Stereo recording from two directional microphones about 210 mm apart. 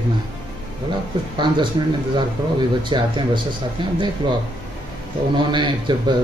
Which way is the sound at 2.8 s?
20° right (ahead or behind).